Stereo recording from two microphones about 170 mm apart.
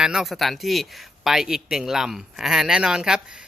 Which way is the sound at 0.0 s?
5° right (ahead or behind).